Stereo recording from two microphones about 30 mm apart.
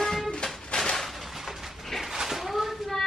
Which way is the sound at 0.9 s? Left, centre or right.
Centre.